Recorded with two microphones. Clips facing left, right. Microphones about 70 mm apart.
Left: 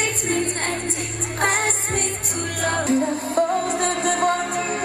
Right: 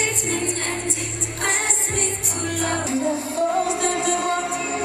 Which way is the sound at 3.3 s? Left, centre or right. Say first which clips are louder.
Left 2 dB; left.